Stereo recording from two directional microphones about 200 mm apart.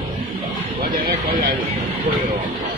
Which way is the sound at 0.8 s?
45° right (ahead or behind).